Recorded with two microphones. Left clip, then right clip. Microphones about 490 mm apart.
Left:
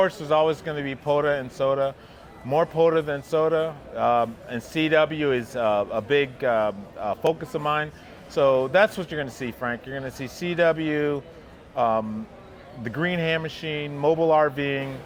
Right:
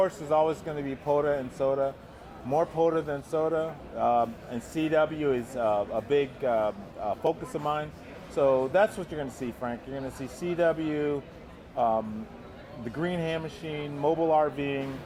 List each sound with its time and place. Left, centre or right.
0.0 s speech: left